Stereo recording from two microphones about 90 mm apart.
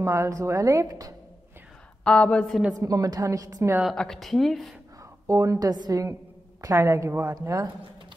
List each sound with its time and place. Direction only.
0.0 s a woman's voice: 30° right (ahead or behind)
2.0 s a woman's voice: 10° left (ahead or behind)
2.7 s a woman's voice: 40° right (ahead or behind)
3.9 s speech: 5° left (ahead or behind)
5.2 s a woman's voice: 35° right (ahead or behind)